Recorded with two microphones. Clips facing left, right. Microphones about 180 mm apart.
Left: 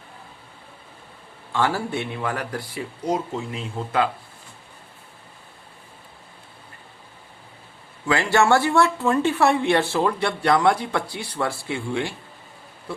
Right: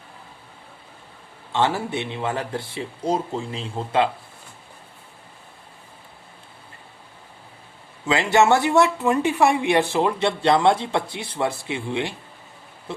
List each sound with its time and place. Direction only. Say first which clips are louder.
1.5 s speech: right 1 dB; 20° right (ahead or behind)
8.0 s speech: right 1 dB; 20° right (ahead or behind)